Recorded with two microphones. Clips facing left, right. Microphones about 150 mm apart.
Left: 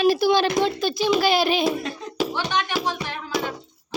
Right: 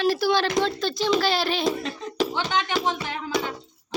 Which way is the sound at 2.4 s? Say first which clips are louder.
Even; 20° right (ahead or behind).